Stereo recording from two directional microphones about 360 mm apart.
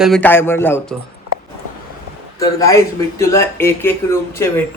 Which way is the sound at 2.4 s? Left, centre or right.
Centre.